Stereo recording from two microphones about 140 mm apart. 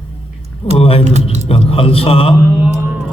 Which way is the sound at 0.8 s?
40° left (ahead or behind).